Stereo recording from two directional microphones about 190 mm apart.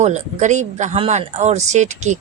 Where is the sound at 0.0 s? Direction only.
40° right (ahead or behind).